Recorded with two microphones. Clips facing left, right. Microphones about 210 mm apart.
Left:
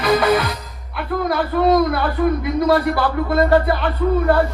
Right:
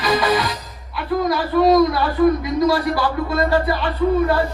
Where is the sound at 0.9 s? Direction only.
55° left (ahead or behind).